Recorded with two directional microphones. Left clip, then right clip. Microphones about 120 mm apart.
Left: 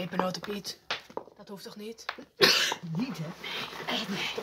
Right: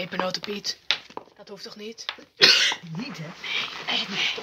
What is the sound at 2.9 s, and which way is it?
Speech, centre (ahead or behind).